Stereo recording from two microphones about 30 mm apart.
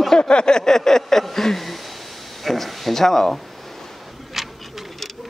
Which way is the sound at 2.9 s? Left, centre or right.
Centre.